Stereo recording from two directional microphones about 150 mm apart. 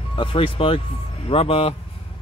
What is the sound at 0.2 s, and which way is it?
Speech, 35° left (ahead or behind).